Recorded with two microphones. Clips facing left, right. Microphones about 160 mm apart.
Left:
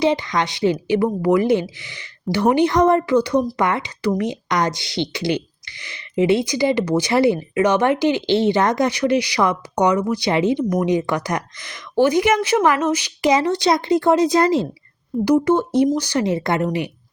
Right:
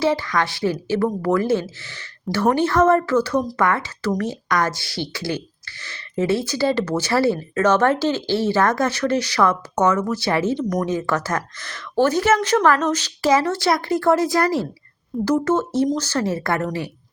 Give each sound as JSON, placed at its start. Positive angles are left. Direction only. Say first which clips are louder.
{"t": 0.0, "sound": "speech", "louder": "left 1 dB", "side_deg": 20}